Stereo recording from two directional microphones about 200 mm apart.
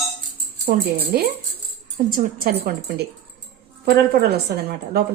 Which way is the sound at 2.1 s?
45° right (ahead or behind).